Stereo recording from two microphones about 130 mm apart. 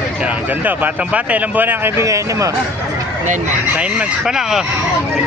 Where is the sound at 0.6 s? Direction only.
10° right (ahead or behind).